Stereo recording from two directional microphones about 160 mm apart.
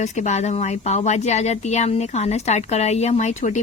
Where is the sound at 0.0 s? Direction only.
45° left (ahead or behind).